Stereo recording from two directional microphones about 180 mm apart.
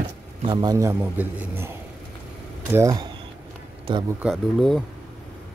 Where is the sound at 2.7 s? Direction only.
20° right (ahead or behind).